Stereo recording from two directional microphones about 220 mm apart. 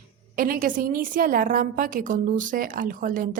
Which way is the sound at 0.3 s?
40° right (ahead or behind).